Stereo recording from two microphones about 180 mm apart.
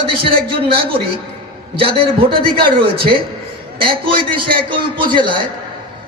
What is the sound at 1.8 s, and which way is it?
Speech, 30° right (ahead or behind).